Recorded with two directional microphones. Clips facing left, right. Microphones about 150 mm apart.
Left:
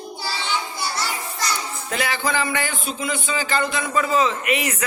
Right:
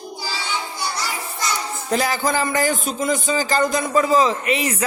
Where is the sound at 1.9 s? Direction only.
40° right (ahead or behind).